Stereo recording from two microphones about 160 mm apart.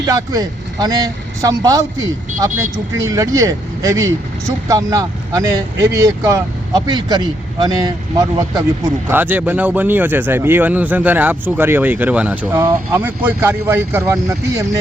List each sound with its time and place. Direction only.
0.0 s speech: 20° right (ahead or behind)